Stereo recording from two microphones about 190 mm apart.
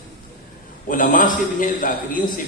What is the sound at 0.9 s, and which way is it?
Speech, 45° left (ahead or behind).